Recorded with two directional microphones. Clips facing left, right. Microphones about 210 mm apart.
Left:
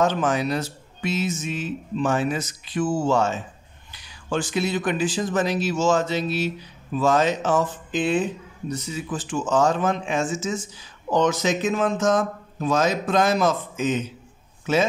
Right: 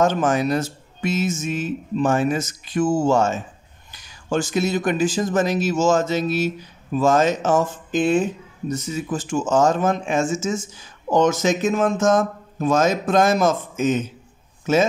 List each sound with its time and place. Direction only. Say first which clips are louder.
0.0 s speech: right 3 dB; 45° right (ahead or behind)